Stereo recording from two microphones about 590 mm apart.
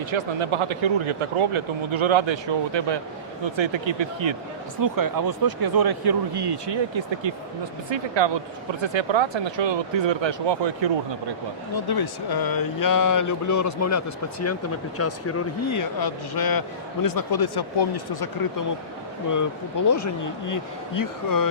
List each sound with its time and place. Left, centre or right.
0.1 s speech: right
4.8 s speech: right
11.7 s speech: left
19.9 s speech: left